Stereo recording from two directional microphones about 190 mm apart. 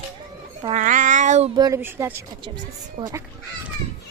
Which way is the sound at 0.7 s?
40° right (ahead or behind).